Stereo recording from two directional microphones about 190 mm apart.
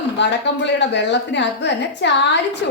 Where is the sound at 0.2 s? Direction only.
65° left (ahead or behind).